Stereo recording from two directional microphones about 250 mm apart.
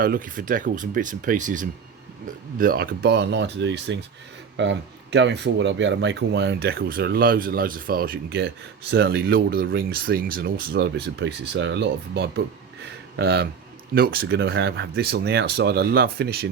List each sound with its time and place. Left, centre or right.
0.0 s speech: right